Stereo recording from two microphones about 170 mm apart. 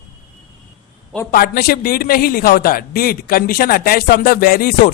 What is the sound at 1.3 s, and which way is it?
A man's voice, 65° left (ahead or behind).